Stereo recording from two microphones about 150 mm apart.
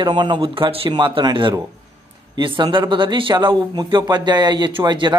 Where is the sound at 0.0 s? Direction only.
30° right (ahead or behind).